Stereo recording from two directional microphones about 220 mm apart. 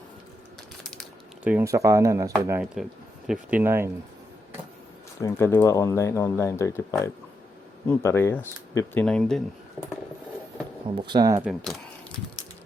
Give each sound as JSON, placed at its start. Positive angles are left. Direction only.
{"t": 1.5, "sound": "speech", "side_deg": -10}
{"t": 5.2, "sound": "speech", "side_deg": 10}
{"t": 10.8, "sound": "speech", "side_deg": -20}
{"t": 11.4, "sound": "speech", "side_deg": 0}